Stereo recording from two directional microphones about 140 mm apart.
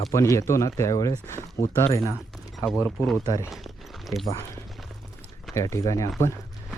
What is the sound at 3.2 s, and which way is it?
Speech, 25° left (ahead or behind).